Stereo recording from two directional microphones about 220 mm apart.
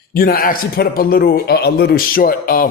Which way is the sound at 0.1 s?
45° left (ahead or behind).